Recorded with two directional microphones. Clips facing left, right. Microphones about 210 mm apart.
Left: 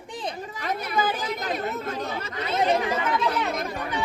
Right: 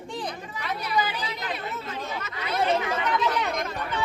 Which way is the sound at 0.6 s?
50° left (ahead or behind).